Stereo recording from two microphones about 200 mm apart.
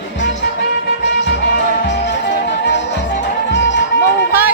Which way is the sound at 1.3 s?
60° left (ahead or behind).